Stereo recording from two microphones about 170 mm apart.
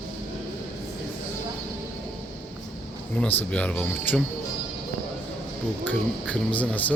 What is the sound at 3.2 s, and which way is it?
Speech, 10° left (ahead or behind).